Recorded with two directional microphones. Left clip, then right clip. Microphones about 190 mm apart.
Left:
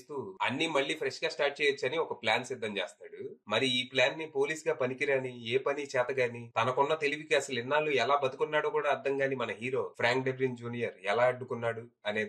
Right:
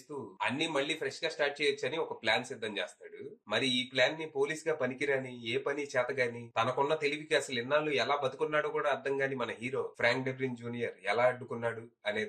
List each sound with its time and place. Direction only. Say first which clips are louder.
0.4 s speech: left 2 dB; 35° left (ahead or behind)